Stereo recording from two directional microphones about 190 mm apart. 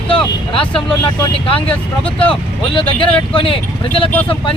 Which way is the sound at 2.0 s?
30° left (ahead or behind).